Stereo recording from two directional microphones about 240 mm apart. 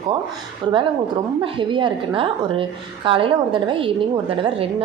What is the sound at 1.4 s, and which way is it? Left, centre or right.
A woman's voice, right.